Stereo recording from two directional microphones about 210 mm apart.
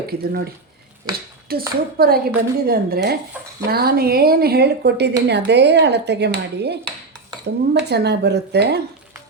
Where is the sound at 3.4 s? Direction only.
5° right (ahead or behind).